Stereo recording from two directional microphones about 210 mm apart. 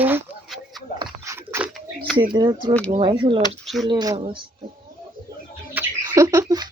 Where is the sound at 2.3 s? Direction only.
20° right (ahead or behind).